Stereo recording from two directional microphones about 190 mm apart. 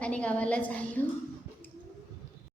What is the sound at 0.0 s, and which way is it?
A woman's voice, 5° left (ahead or behind).